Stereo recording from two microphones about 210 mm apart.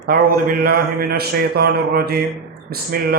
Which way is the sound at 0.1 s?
45° right (ahead or behind).